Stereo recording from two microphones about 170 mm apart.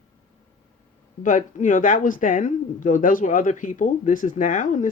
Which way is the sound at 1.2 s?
50° left (ahead or behind).